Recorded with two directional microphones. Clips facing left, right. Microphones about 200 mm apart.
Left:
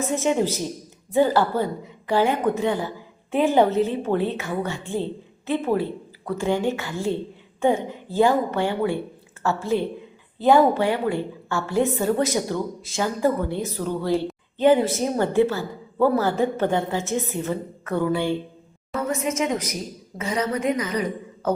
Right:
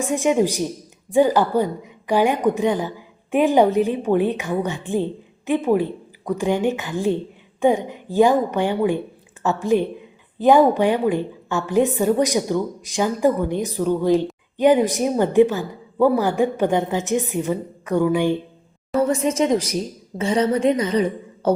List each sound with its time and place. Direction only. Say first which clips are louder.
0.0 s a woman's voice: right 3 dB; 15° right (ahead or behind)
18.9 s a woman's voice: right 6 dB; 30° right (ahead or behind)